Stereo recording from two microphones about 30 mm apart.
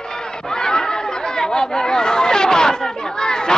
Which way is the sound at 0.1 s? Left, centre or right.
Left.